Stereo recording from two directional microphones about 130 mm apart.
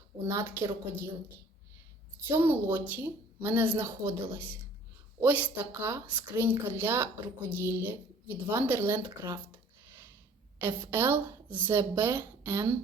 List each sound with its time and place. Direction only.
0.3 s a woman's voice: 20° right (ahead or behind)
2.2 s speech: 15° right (ahead or behind)
10.6 s a woman's voice: 20° right (ahead or behind)